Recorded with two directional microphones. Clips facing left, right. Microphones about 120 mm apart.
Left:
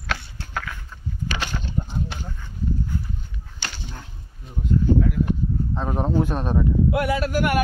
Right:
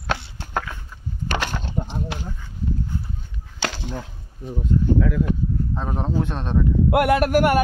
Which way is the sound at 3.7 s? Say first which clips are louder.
Right 8 dB; 90° right.